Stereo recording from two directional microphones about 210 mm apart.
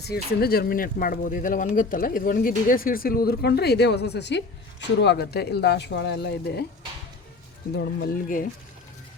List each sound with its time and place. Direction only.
0.0 s speech: 50° left (ahead or behind)
7.8 s speech: 50° left (ahead or behind)